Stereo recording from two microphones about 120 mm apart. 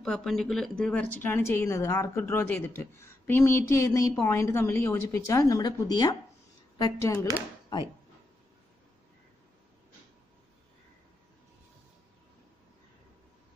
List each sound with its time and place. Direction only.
0.0 s speech: 5° left (ahead or behind); by 6.1 s 35° left (ahead or behind)
7.0 s speech: 20° left (ahead or behind)